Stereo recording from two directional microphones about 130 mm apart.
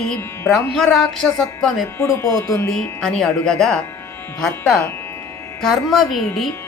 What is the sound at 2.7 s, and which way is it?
Speech, 5° left (ahead or behind).